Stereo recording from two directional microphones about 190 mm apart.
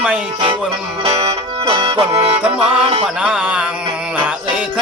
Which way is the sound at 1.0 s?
30° right (ahead or behind).